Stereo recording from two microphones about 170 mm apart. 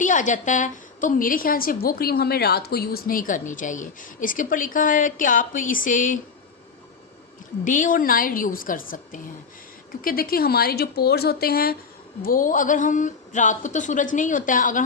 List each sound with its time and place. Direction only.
0.0 s a woman's voice: 50° left (ahead or behind)
7.6 s a woman's voice: 50° left (ahead or behind)